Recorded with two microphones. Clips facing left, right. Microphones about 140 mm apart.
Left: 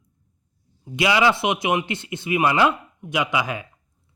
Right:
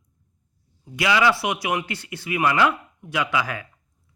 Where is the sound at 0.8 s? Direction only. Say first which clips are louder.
Left 1 dB; 20° left (ahead or behind).